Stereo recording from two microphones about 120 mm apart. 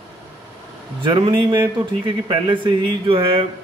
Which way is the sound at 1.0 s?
45° right (ahead or behind).